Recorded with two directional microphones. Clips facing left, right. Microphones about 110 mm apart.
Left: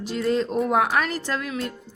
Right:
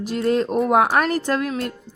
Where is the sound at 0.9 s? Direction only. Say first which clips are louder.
Right 5 dB; 45° right (ahead or behind).